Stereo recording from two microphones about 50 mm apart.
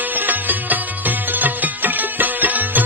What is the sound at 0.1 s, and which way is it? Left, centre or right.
Music, right.